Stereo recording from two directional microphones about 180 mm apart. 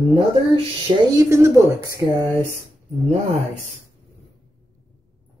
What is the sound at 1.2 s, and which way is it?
Speech, 15° right (ahead or behind).